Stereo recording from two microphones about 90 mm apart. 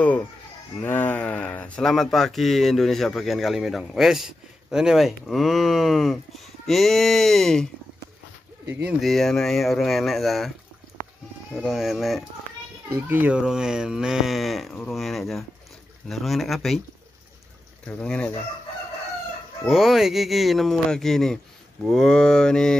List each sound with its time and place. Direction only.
0.7 s a man's voice: 20° left (ahead or behind); by 7.6 s 5° left (ahead or behind)
9.0 s a man's voice: 5° left (ahead or behind)
11.6 s a man's voice: centre (ahead or behind)
12.9 s speech: 20° right (ahead or behind)
13.4 s a man's voice: 10° right (ahead or behind)
17.8 s mantra: 10° left (ahead or behind)
19.6 s a man's voice: 5° right (ahead or behind)
21.8 s mantra: 5° left (ahead or behind)